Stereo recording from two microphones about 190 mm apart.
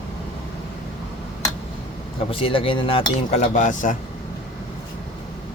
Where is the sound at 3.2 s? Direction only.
40° left (ahead or behind).